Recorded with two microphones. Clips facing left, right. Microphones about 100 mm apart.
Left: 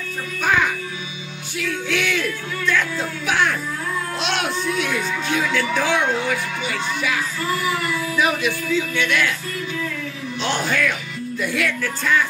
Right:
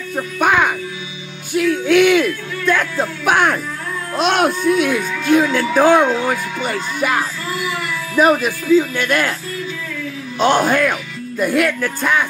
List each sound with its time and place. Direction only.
0.1 s speech: 60° right (ahead or behind); by 9.3 s 45° right (ahead or behind)
10.4 s speech: 50° right (ahead or behind)